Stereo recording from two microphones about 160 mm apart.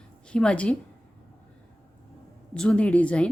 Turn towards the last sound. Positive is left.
turn(degrees=5)  # may be behind; listen again after turning